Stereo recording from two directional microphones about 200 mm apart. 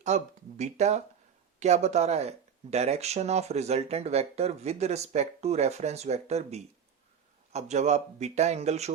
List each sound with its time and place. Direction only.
0.0 s speech: 35° right (ahead or behind)